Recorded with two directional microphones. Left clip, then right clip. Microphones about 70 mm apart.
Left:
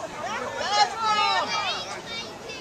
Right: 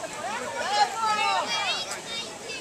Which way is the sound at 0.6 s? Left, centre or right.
Left.